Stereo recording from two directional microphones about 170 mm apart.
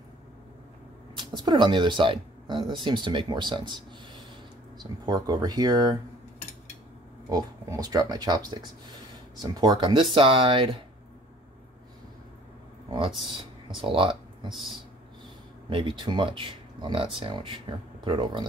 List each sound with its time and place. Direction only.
1.1 s speech: 25° right (ahead or behind)
5.0 s speech: 25° right (ahead or behind)
7.2 s speech: 20° right (ahead or behind)
13.7 s speech: 30° right (ahead or behind)
15.7 s speech: 30° right (ahead or behind)